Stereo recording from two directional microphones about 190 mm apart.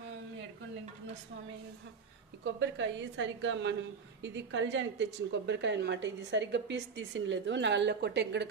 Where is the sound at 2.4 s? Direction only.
75° right (ahead or behind).